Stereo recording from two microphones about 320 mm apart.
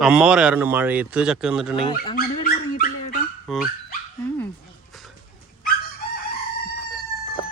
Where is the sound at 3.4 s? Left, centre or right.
Centre.